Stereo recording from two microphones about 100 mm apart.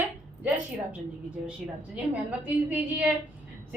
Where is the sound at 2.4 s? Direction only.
15° right (ahead or behind).